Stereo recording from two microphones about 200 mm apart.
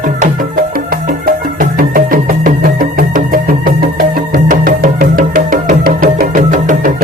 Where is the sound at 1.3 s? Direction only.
45° right (ahead or behind).